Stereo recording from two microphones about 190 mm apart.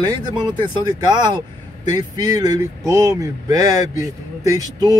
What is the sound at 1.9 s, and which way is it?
Speech, 20° right (ahead or behind).